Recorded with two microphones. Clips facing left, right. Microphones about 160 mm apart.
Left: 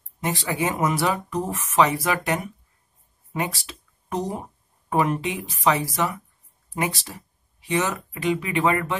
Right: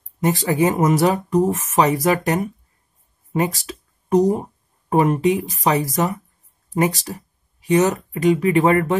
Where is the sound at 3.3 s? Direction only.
40° right (ahead or behind).